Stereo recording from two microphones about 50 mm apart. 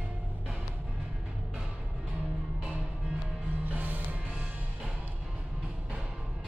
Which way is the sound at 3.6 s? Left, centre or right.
Right.